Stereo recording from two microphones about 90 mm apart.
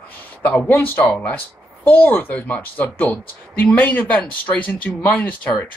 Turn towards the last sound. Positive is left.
turn(degrees=15)  # may be behind; listen again after turning